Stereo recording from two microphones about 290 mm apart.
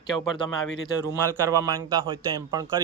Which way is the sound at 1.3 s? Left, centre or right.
Centre.